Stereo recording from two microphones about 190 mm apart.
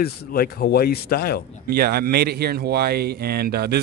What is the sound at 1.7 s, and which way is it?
Speech, 55° right (ahead or behind).